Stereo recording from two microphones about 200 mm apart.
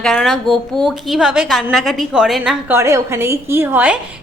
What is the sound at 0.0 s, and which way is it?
A woman's voice, centre (ahead or behind).